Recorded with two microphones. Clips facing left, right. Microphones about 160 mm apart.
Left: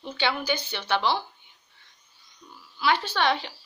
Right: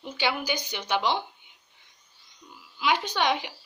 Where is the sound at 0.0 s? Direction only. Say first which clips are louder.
Left 1 dB; 10° right (ahead or behind).